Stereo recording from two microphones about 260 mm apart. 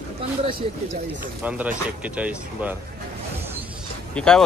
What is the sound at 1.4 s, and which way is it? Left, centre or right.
Speech, centre.